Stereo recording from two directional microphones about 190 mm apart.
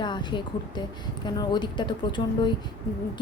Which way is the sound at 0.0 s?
25° left (ahead or behind).